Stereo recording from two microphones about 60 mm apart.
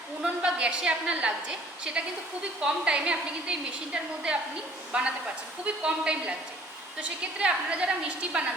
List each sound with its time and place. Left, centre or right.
0.4 s a woman's voice: centre